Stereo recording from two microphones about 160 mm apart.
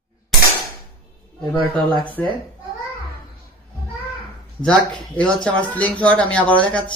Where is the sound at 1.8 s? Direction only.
30° right (ahead or behind).